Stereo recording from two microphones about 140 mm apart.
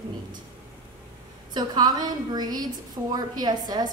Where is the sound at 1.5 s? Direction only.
30° right (ahead or behind).